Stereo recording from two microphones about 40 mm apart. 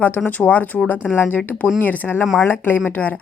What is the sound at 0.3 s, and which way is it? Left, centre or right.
Speech, left.